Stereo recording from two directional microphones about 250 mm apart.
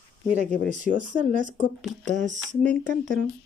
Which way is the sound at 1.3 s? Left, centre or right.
Right.